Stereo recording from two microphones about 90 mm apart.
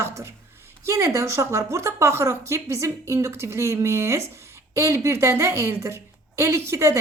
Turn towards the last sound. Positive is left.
turn(degrees=-35)  # may be behind; listen again after turning